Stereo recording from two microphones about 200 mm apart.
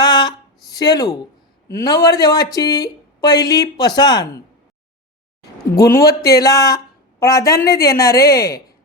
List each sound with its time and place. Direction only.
0.0 s a sound: 20° left (ahead or behind)
1.6 s speech: 15° left (ahead or behind)
5.7 s speech: 15° left (ahead or behind)